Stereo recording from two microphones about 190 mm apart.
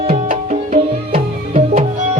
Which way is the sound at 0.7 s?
35° right (ahead or behind).